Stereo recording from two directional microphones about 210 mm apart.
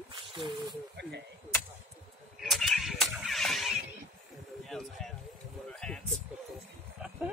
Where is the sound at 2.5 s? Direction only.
Centre (ahead or behind).